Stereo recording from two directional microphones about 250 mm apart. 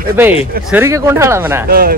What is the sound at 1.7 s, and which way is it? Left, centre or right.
Speech, right.